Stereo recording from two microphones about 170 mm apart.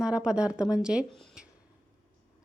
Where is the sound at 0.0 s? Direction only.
5° right (ahead or behind).